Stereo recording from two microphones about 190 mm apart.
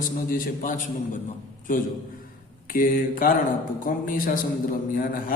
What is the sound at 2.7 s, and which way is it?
A man's voice, 45° left (ahead or behind).